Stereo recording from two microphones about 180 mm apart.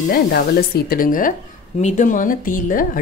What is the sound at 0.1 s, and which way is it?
A woman's voice, 60° left (ahead or behind).